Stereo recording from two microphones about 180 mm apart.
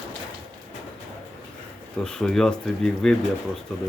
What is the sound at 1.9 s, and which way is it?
Speech, 5° left (ahead or behind).